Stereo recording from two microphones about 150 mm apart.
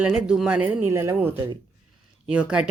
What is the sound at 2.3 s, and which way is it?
Speech, 5° right (ahead or behind).